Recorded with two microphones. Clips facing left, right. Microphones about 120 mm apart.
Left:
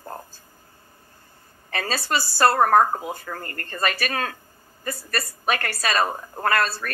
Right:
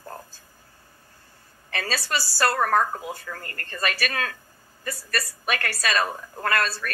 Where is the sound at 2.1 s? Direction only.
50° left (ahead or behind).